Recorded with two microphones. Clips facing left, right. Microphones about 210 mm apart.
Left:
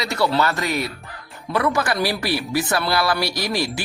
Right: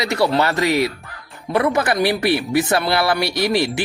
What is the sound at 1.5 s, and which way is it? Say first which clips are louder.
Speech: right 3 dB; 20° right (ahead or behind).